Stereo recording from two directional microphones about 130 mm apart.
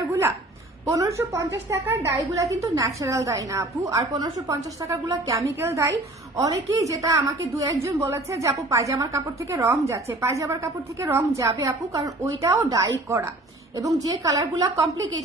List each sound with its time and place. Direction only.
0.0 s a sound: 20° right (ahead or behind)
0.8 s a woman's voice: 25° right (ahead or behind)
14.2 s a woman's voice: 25° right (ahead or behind)